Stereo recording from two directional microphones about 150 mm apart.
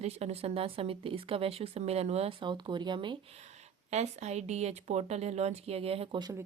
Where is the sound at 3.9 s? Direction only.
50° right (ahead or behind).